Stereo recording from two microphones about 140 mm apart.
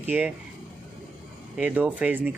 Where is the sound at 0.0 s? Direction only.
10° right (ahead or behind).